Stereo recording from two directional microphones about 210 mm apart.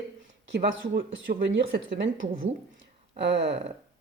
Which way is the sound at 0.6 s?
45° right (ahead or behind).